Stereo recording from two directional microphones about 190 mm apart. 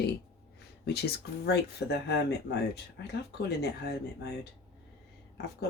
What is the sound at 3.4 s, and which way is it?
Speech, 60° left (ahead or behind).